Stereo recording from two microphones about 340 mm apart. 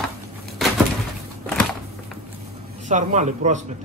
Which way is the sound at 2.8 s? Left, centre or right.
Right.